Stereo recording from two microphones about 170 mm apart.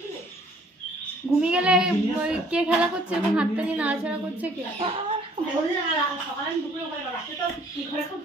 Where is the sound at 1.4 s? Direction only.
5° right (ahead or behind).